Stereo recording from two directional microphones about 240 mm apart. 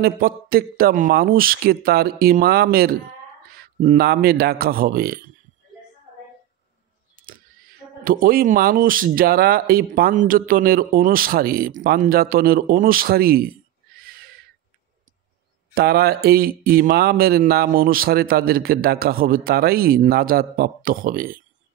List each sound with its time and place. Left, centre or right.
0.0 s speech: right
7.2 s camera: right
8.0 s speech: right
14.0 s a sound: right
15.7 s speech: right